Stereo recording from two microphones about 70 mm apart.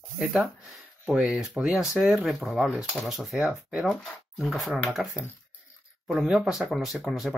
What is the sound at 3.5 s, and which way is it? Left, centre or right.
Speech, centre.